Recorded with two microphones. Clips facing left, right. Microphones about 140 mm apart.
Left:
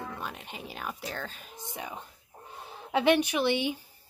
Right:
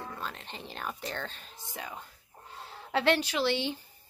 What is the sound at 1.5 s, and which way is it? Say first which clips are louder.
Speech: left 2 dB; 20° left (ahead or behind).